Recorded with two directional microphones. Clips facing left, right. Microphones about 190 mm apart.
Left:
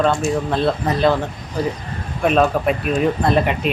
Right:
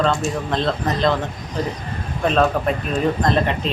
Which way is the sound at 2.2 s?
10° left (ahead or behind).